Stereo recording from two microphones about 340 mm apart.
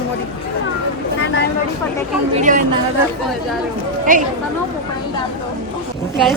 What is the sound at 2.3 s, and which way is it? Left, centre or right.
Speech, right.